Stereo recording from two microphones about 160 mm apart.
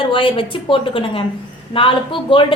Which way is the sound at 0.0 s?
35° left (ahead or behind).